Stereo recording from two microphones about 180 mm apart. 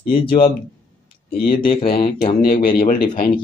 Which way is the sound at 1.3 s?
55° left (ahead or behind).